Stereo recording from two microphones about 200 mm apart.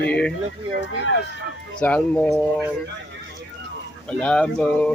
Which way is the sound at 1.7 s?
5° left (ahead or behind).